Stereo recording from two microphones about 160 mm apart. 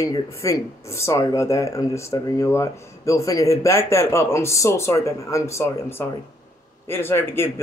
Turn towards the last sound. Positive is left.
turn(degrees=15)  # may be behind; listen again after turning